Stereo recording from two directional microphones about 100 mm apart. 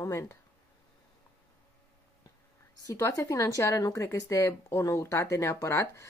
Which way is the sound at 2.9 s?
30° left (ahead or behind).